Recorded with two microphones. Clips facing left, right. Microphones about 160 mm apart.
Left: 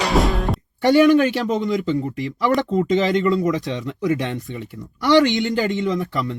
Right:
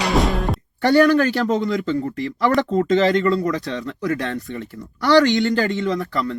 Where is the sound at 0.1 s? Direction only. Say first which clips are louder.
Even; centre (ahead or behind).